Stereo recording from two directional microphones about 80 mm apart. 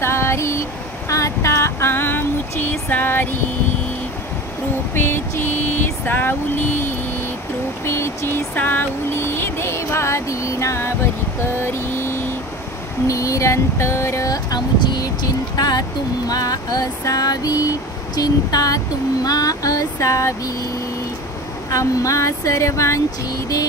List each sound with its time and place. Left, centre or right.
0.0 s a sound: left
4.9 s speech: left
7.8 s a sound: left
8.5 s music: left
11.6 s vehicle: left
13.0 s music: left
14.8 s music: left
15.5 s music: left
16.3 s a sound: left
19.2 s speech: left
21.6 s speech: left